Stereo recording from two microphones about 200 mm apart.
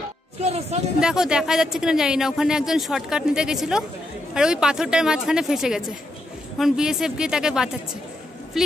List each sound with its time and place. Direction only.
0.4 s speech: 35° right (ahead or behind)
0.9 s a woman's voice: 5° right (ahead or behind)